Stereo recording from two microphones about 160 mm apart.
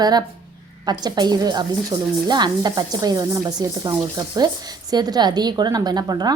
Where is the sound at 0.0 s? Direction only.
25° right (ahead or behind).